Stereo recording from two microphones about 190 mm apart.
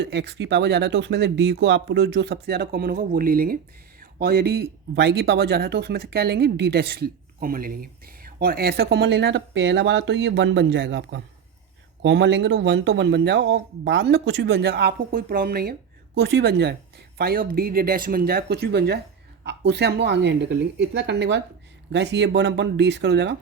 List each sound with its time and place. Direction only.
0.0 s speech: 65° right (ahead or behind)
17.2 s speech: 50° right (ahead or behind)